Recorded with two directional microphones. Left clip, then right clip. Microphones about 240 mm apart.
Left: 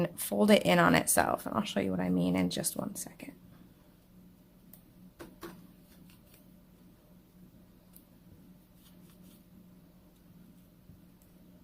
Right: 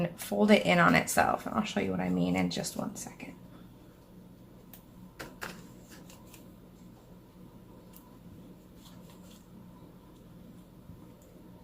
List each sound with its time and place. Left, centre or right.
0.0 s speech: left